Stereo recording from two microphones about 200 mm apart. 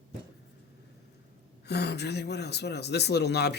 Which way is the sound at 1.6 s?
55° left (ahead or behind).